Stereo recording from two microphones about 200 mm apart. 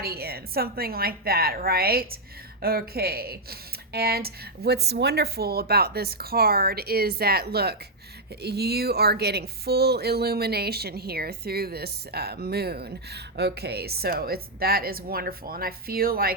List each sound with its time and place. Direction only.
0.0 s speech: 50° right (ahead or behind)